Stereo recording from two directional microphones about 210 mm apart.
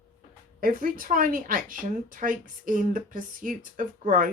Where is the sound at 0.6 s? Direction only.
40° right (ahead or behind).